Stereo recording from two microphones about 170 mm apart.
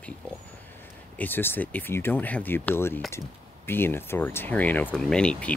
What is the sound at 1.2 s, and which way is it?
Speech, 10° left (ahead or behind).